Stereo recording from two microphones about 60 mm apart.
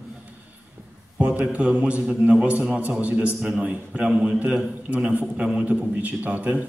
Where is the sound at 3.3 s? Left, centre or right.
Centre.